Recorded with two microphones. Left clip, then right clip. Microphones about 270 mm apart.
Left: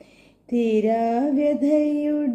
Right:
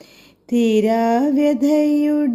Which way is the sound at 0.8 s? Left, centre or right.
Right.